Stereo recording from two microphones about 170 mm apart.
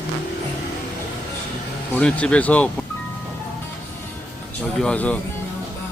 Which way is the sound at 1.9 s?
5° left (ahead or behind).